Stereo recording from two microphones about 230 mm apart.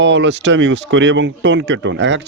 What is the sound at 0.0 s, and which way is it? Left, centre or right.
Speech, right.